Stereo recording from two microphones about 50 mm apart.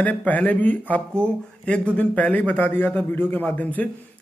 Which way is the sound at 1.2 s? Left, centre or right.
Left.